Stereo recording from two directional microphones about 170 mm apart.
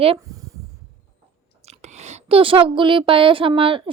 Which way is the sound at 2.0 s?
40° right (ahead or behind).